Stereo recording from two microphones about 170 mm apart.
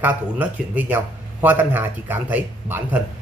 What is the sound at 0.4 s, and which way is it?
A man's voice, 10° right (ahead or behind).